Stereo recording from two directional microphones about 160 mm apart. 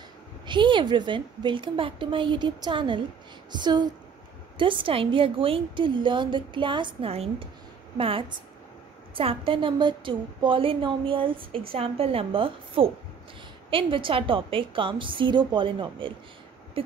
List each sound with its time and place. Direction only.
0.5 s a woman's voice: 30° right (ahead or behind)